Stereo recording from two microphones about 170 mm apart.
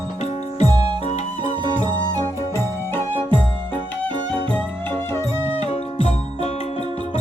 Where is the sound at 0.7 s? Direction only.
25° right (ahead or behind).